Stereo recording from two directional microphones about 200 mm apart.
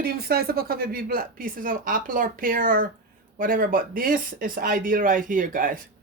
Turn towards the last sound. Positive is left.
turn(degrees=-45)  # may be behind; listen again after turning